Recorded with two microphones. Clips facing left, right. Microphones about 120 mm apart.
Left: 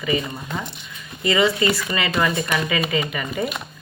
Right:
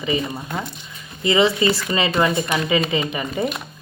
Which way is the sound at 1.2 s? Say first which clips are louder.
Right 2 dB; 25° right (ahead or behind).